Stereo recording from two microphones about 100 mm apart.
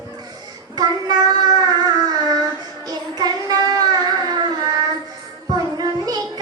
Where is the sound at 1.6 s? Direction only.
45° right (ahead or behind).